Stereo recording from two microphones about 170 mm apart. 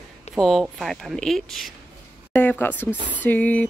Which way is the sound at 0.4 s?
Centre (ahead or behind).